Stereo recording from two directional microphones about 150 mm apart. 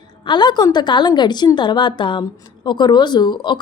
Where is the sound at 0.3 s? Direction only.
30° left (ahead or behind).